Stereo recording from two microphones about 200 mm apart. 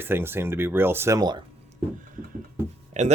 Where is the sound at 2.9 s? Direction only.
35° right (ahead or behind).